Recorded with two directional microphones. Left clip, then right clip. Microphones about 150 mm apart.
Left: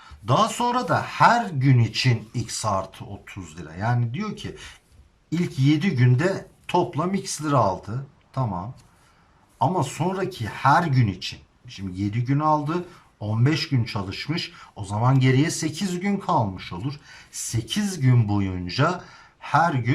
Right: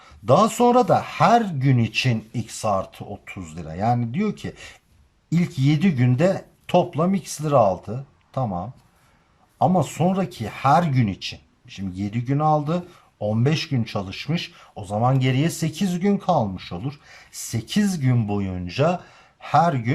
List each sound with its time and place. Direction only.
0.0 s speech: 25° right (ahead or behind)